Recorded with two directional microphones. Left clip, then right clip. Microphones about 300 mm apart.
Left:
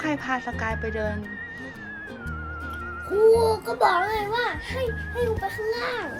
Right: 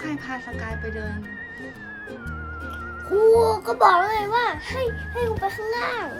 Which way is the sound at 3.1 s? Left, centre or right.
Centre.